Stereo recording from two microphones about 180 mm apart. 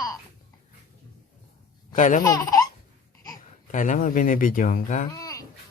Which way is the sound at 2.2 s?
20° left (ahead or behind).